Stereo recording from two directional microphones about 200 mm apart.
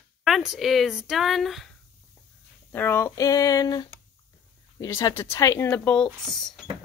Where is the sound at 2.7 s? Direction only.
10° left (ahead or behind).